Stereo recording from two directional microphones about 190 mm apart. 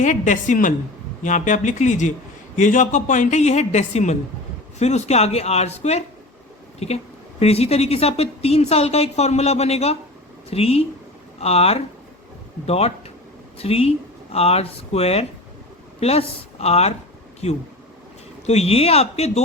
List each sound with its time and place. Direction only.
0.0 s a woman's voice: 40° left (ahead or behind)
18.4 s a woman's voice: 35° left (ahead or behind)